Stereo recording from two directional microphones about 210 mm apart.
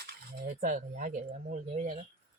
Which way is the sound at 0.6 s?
40° right (ahead or behind).